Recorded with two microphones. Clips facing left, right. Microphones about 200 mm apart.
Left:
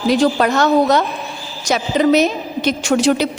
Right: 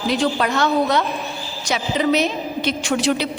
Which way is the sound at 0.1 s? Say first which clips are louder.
Left 6 dB; 45° left (ahead or behind).